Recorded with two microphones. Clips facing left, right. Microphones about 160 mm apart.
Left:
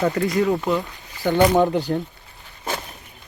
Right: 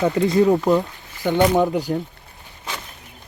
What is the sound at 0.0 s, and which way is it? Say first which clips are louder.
Speech: right 3 dB; 20° right (ahead or behind).